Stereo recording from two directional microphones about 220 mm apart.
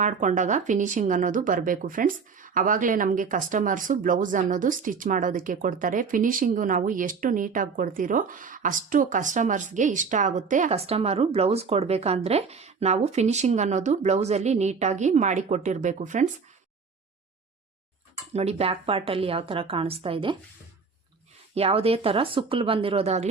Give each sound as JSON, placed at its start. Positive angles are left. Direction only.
{"t": 0.0, "sound": "speech", "side_deg": -35}
{"t": 18.3, "sound": "a woman's voice", "side_deg": -30}
{"t": 21.5, "sound": "a woman's voice", "side_deg": -25}